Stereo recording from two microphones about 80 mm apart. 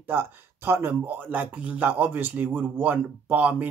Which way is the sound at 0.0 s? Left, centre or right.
Right.